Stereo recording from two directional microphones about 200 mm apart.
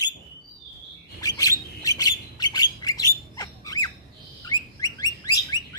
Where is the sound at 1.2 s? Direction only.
15° left (ahead or behind).